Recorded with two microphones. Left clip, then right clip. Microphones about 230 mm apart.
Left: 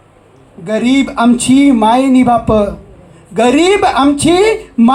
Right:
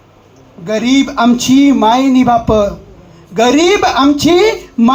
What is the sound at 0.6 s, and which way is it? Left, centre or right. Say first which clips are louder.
A woman's voice: even; left.